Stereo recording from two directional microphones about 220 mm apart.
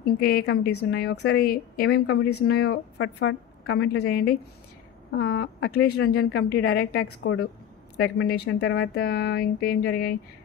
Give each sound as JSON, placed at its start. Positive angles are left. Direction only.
{"t": 0.0, "sound": "a woman's voice", "side_deg": 45}
{"t": 7.0, "sound": "a woman's voice", "side_deg": 85}
{"t": 8.0, "sound": "a woman's voice", "side_deg": 45}